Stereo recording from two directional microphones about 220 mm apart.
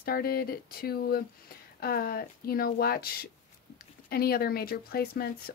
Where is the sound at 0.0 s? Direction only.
45° left (ahead or behind).